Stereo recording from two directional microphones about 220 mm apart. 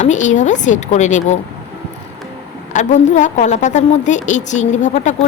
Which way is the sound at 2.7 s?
35° left (ahead or behind).